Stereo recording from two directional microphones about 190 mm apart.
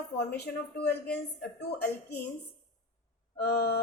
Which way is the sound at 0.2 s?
60° left (ahead or behind).